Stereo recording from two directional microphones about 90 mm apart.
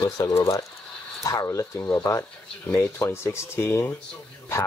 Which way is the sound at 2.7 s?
30° left (ahead or behind).